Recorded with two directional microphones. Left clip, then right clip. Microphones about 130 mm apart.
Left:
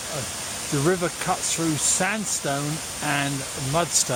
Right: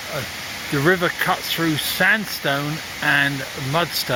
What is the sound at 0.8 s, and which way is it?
Speech, 15° right (ahead or behind).